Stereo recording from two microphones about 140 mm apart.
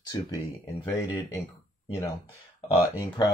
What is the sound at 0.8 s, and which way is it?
Speech, 20° left (ahead or behind).